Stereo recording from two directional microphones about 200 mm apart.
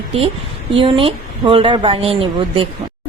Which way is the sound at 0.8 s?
25° right (ahead or behind).